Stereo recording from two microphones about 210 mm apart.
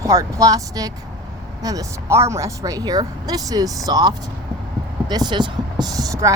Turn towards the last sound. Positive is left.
turn(degrees=-15)  # may be behind; listen again after turning